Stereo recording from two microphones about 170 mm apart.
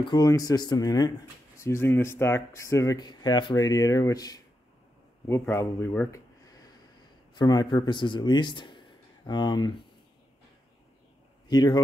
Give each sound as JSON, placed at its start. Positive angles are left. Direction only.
{"t": 0.0, "sound": "speech", "side_deg": 25}
{"t": 5.5, "sound": "a man's voice", "side_deg": 15}
{"t": 11.4, "sound": "a man's voice", "side_deg": 25}